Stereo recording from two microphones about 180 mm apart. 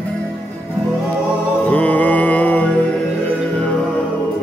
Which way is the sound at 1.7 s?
10° left (ahead or behind).